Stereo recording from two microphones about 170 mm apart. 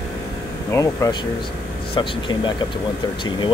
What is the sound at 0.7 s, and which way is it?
Speech, 20° left (ahead or behind).